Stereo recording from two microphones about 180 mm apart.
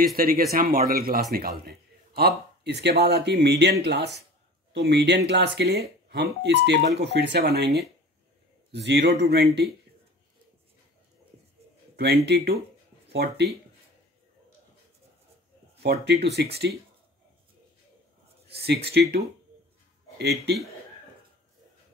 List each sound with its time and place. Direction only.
0.0 s speech: 55° right (ahead or behind)
12.3 s speech: 65° right (ahead or behind)
15.8 s speech: 65° right (ahead or behind)
18.5 s speech: 65° right (ahead or behind)